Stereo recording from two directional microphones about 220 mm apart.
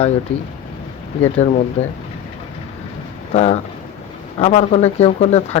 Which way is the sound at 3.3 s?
30° left (ahead or behind).